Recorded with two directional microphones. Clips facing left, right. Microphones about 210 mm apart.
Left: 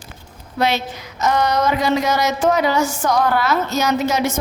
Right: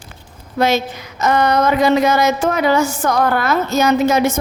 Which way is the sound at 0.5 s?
45° right (ahead or behind).